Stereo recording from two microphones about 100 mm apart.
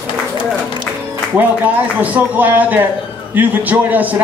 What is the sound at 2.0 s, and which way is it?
A man's voice, 15° right (ahead or behind).